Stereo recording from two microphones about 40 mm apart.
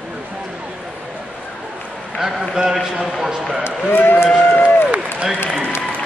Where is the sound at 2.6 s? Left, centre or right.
Centre.